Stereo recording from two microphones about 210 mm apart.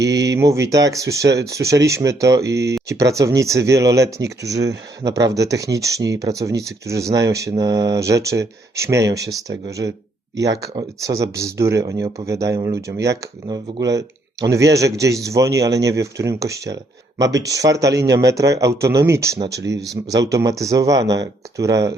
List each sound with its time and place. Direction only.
0.0 s speech: 15° right (ahead or behind)
4.5 s speech: 55° right (ahead or behind)
5.0 s speech: 15° right (ahead or behind)